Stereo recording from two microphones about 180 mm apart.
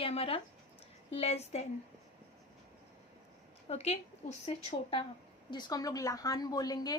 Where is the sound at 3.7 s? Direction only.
35° left (ahead or behind).